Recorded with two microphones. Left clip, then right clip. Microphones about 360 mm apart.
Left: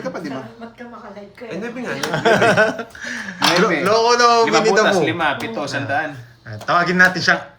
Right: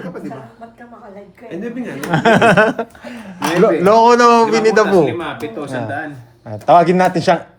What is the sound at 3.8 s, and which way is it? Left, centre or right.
Speech, centre.